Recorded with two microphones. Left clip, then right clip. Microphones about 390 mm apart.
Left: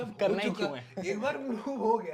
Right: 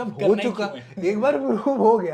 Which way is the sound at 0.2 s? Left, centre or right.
Left.